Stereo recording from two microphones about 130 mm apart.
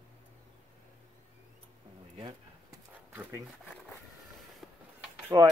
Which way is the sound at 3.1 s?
20° right (ahead or behind).